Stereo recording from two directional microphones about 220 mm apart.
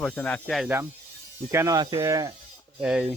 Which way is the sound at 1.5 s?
15° right (ahead or behind).